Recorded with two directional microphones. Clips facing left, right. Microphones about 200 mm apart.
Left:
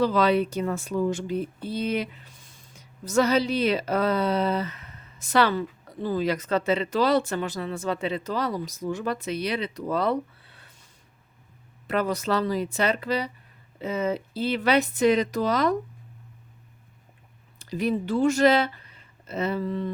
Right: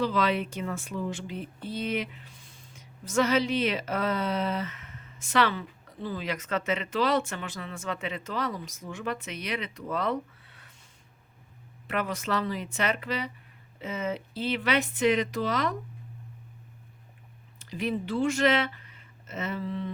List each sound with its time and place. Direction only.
0.0 s a woman's voice: 40° left (ahead or behind)
11.9 s a woman's voice: 35° left (ahead or behind)
17.6 s speech: 40° left (ahead or behind)